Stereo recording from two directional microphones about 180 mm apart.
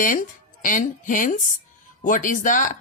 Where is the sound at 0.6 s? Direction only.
45° left (ahead or behind).